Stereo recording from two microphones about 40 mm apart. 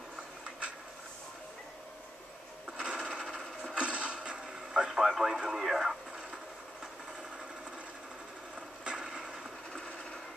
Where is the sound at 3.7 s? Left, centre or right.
Right; by 6.9 s centre.